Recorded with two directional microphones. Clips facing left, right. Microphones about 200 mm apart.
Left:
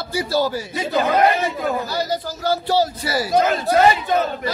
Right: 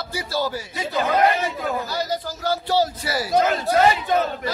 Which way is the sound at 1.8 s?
35° left (ahead or behind).